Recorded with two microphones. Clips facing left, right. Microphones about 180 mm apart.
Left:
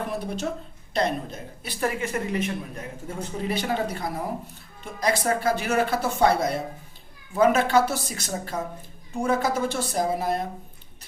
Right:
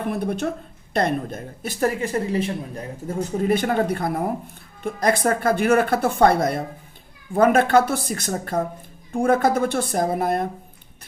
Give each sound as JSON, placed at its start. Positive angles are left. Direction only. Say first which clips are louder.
{"t": 0.1, "sound": "a woman's voice", "louder": "right 5 dB", "side_deg": -55}